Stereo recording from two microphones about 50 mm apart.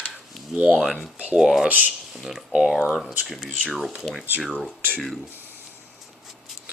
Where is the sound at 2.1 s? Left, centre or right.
Centre.